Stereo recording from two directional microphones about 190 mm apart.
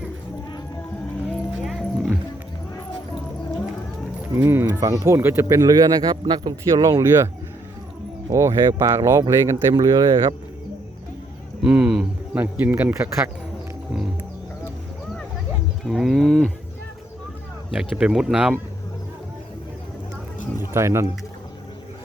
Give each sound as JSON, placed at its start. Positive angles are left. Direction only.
{"t": 1.3, "sound": "a sound", "side_deg": 0}
{"t": 4.4, "sound": "speech", "side_deg": -15}
{"t": 8.3, "sound": "speech", "side_deg": -15}
{"t": 11.6, "sound": "speech", "side_deg": -5}
{"t": 15.8, "sound": "speech", "side_deg": 0}
{"t": 17.7, "sound": "speech", "side_deg": -5}
{"t": 20.6, "sound": "speech", "side_deg": -15}